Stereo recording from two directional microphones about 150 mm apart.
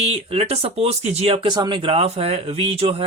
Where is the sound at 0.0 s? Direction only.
45° right (ahead or behind).